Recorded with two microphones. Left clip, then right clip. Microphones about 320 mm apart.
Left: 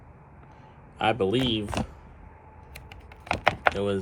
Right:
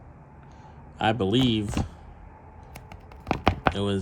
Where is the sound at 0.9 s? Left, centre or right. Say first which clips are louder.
Even; right.